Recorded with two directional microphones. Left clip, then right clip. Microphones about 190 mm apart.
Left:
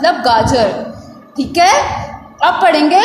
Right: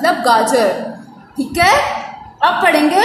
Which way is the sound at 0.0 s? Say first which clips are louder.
Left 1 dB; 30° left (ahead or behind).